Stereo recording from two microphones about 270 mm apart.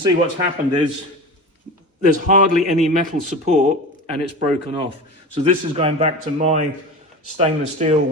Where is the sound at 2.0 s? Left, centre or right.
Right.